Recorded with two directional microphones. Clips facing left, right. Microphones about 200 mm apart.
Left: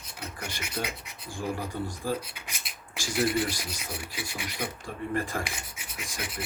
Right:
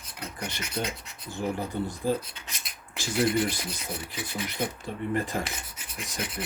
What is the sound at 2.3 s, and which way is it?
Filing, 10° left (ahead or behind).